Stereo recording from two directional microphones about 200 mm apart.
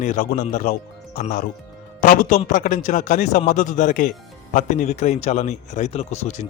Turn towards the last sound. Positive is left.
turn(degrees=35)  # may be behind; listen again after turning